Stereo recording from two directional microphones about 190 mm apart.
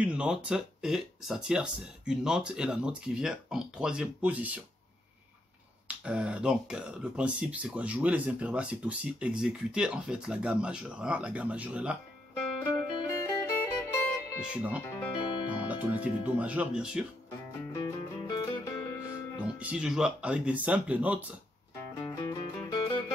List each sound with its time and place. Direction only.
0.0 s speech: 5° right (ahead or behind)
5.9 s speech: 5° right (ahead or behind)
12.6 s music: 15° left (ahead or behind)
14.4 s speech: 5° right (ahead or behind)
15.2 s speech: 25° left (ahead or behind)
15.7 s speech: 10° right (ahead or behind)
17.7 s music: 20° left (ahead or behind)
19.4 s speech: 5° right (ahead or behind)
22.0 s music: 20° left (ahead or behind)